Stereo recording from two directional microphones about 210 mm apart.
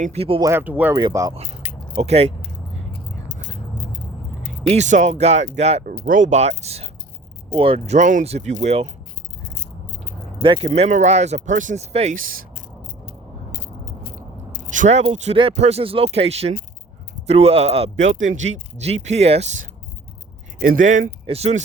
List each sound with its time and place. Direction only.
0.0 s speech: 30° right (ahead or behind)
0.5 s speech: 10° right (ahead or behind)
2.0 s speech: 30° right (ahead or behind)
4.7 s speech: 35° right (ahead or behind)
10.4 s speech: 25° right (ahead or behind)
10.7 s speech: 35° right (ahead or behind)
13.1 s a sound: 50° left (ahead or behind)
14.7 s speech: 35° right (ahead or behind)
18.3 s speech: 65° right (ahead or behind)
18.5 s speech: 30° right (ahead or behind)